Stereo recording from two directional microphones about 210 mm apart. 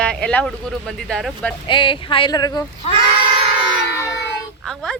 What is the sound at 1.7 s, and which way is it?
Speech, 25° left (ahead or behind).